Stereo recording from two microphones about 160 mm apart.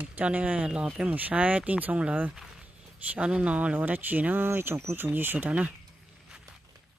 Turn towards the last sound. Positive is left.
turn(degrees=-10)  # may be behind; listen again after turning